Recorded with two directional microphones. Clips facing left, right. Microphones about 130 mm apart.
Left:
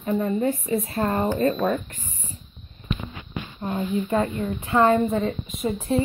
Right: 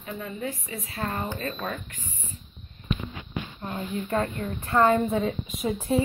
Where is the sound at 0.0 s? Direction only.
45° left (ahead or behind).